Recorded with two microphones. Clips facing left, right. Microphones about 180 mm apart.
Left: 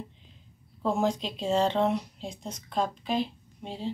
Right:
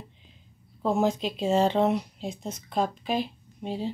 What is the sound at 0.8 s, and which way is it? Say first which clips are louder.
Speech: right 2 dB; 5° right (ahead or behind).